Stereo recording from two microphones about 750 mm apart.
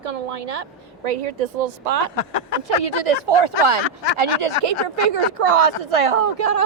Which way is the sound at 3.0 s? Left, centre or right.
Right.